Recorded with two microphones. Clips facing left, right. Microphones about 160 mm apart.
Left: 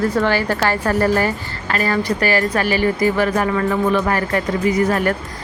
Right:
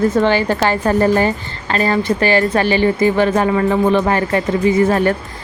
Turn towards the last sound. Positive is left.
turn(degrees=-25)  # may be behind; listen again after turning